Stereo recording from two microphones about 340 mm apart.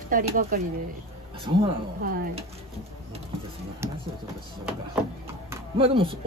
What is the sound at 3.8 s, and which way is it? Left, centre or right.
Speech, centre.